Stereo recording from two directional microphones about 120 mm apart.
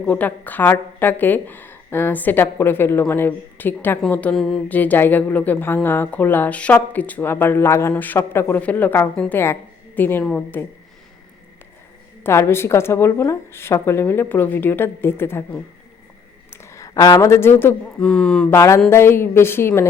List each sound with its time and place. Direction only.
0.0 s speech: 10° left (ahead or behind)
4.8 s a woman's voice: 15° left (ahead or behind)
12.2 s speech: 20° left (ahead or behind)
16.5 s a sound: 20° left (ahead or behind)
18.0 s speech: 5° left (ahead or behind)
18.5 s speech: 25° left (ahead or behind)